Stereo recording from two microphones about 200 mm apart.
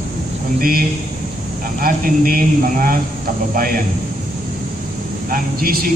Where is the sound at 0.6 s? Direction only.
45° right (ahead or behind).